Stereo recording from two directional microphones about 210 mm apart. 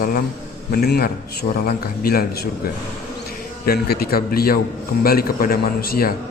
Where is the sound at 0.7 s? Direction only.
50° left (ahead or behind).